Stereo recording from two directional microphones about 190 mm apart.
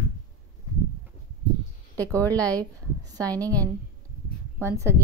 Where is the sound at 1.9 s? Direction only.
10° left (ahead or behind).